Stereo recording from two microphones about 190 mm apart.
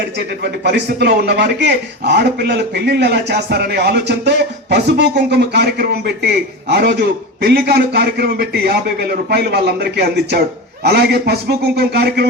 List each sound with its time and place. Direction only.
0.4 s speech: 60° right (ahead or behind)